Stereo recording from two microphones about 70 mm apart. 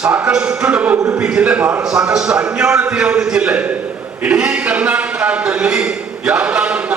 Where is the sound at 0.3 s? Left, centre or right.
Centre.